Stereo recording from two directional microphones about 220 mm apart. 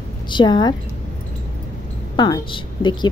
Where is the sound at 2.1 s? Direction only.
20° left (ahead or behind).